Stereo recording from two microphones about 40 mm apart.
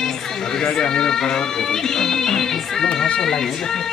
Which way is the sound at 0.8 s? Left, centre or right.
Centre.